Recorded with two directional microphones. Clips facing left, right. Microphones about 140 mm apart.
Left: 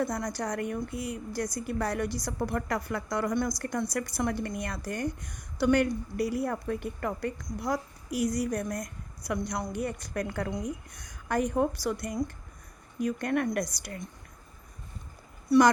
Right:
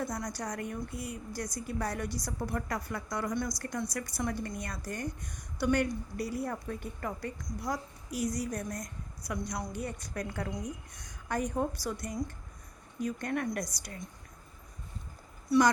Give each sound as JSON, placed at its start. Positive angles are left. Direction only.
{"t": 0.0, "sound": "speech", "side_deg": 65}
{"t": 15.4, "sound": "speech", "side_deg": 65}